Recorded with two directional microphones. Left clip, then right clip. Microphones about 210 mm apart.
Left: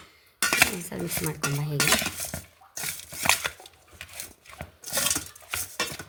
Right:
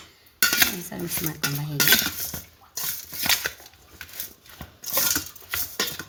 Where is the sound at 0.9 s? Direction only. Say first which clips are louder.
Even; 45° left (ahead or behind).